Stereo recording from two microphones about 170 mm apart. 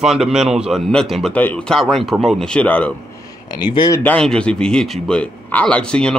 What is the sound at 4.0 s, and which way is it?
Speech, 5° left (ahead or behind).